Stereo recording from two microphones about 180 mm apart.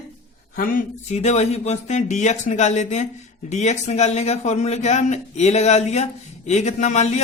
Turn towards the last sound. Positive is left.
turn(degrees=40)  # may be behind; listen again after turning